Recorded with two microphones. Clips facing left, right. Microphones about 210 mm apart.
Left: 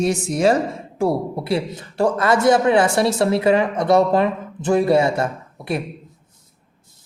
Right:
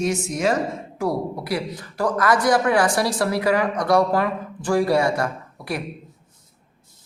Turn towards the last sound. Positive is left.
turn(degrees=25)  # may be behind; listen again after turning